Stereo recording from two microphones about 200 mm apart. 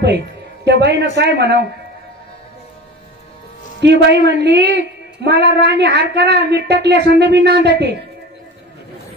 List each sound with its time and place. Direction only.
0.7 s a woman's voice: 55° right (ahead or behind)
3.8 s a woman's voice: 60° right (ahead or behind)